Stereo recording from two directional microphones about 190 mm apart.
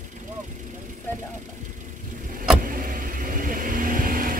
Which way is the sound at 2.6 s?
45° right (ahead or behind).